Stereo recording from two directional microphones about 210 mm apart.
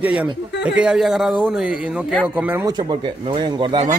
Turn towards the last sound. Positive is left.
turn(degrees=-20)  # may be behind; listen again after turning